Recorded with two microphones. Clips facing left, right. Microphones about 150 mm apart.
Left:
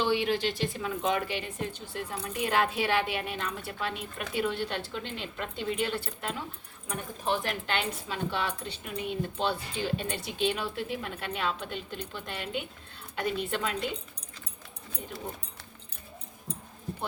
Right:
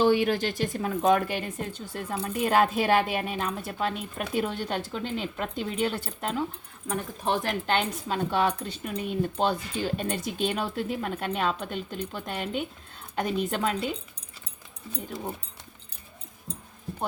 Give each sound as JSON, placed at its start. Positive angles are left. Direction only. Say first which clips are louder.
{"t": 0.0, "sound": "a woman's voice", "louder": "right 5 dB", "side_deg": -45}